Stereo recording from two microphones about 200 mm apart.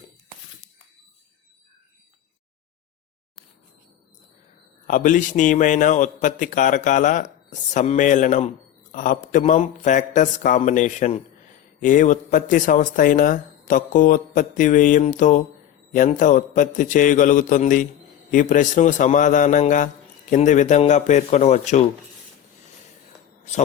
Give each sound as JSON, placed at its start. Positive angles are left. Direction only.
{"t": 4.9, "sound": "a man's voice", "side_deg": 40}